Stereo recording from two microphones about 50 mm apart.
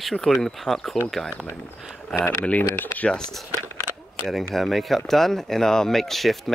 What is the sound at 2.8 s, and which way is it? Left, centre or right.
Speech, left.